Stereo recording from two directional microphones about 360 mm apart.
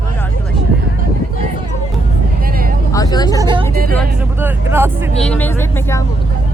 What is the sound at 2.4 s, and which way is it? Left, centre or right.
Vehicle, right.